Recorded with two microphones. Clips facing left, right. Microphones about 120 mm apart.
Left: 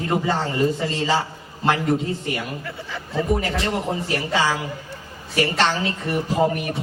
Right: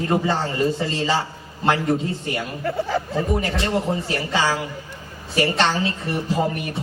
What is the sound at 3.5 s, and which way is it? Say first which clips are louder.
A man's voice: right 1 dB; 30° right (ahead or behind).